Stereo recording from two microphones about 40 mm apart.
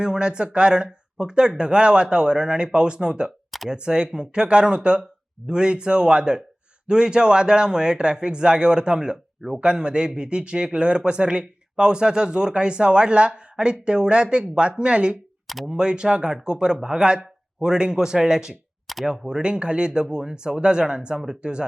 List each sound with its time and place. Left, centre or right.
0.0 s speech: right
18.9 s a sound: centre
19.4 s speech: right